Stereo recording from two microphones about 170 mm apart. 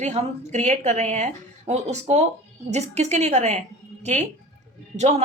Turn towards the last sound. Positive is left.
turn(degrees=-40)  # may be behind; listen again after turning